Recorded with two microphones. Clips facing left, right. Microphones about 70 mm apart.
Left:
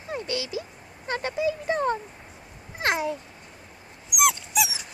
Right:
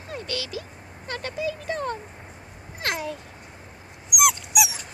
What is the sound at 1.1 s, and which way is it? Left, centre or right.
Speech, left.